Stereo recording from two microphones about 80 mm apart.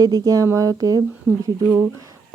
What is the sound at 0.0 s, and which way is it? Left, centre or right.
Speech, right.